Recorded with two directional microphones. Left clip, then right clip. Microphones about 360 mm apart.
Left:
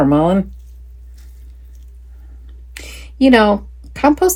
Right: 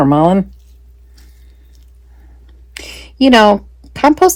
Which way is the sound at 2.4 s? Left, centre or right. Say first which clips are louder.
Right 4 dB; right.